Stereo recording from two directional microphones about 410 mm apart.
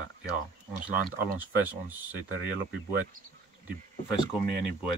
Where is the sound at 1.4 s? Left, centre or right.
Centre.